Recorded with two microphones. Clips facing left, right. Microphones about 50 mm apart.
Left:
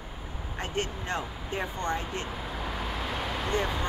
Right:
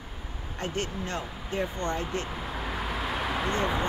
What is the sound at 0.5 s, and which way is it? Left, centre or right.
Speech, left.